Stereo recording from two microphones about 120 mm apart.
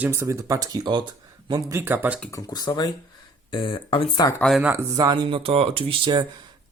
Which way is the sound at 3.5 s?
45° left (ahead or behind).